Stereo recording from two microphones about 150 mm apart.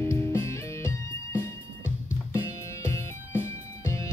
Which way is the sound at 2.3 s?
20° left (ahead or behind).